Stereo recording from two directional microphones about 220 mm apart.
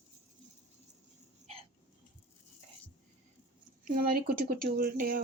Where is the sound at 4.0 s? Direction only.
40° right (ahead or behind).